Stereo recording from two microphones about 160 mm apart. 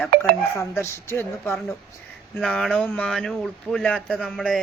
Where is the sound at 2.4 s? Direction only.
5° left (ahead or behind).